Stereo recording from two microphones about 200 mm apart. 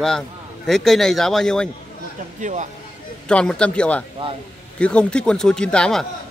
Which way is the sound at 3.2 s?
5° left (ahead or behind).